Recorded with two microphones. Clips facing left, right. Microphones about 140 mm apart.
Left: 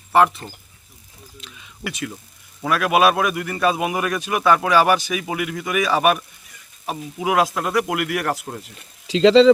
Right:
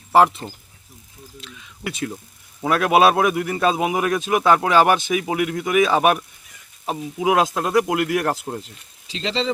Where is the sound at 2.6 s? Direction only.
25° right (ahead or behind).